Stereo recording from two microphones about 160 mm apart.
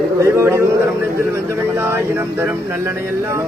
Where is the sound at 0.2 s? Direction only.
15° right (ahead or behind).